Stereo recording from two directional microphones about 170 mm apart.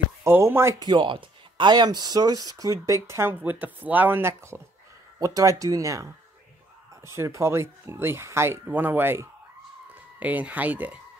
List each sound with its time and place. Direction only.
0.2 s speech: 15° right (ahead or behind)